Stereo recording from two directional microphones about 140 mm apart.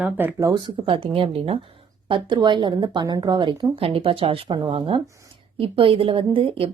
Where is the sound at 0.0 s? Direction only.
15° right (ahead or behind).